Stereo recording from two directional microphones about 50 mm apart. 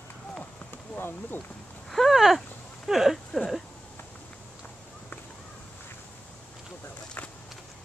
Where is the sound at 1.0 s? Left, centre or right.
Left.